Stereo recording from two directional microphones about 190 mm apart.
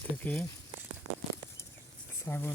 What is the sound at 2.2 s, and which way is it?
Speech, 10° left (ahead or behind).